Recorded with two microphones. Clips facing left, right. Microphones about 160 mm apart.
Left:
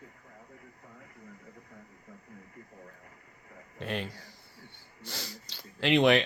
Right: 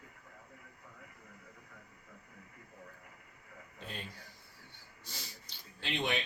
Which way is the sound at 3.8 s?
85° left.